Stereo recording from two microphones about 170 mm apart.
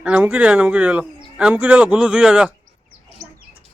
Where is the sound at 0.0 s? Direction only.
10° right (ahead or behind).